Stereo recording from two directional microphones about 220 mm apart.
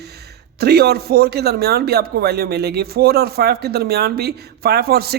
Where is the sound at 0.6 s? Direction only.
45° right (ahead or behind).